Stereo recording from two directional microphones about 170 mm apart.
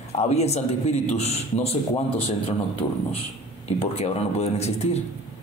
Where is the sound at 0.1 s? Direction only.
40° left (ahead or behind).